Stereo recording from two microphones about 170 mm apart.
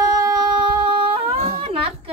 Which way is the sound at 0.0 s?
20° right (ahead or behind).